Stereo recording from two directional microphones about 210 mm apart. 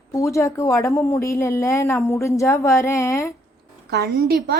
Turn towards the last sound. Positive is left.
turn(degrees=-50)  # may be behind; listen again after turning